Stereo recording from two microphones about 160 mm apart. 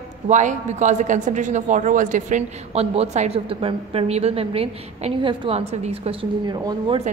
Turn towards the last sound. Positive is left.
turn(degrees=-25)  # may be behind; listen again after turning